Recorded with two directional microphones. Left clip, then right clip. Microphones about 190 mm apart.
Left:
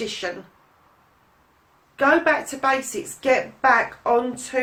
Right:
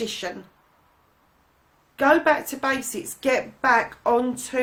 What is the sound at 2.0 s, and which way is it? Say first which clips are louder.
A woman's voice: even; 45° right (ahead or behind).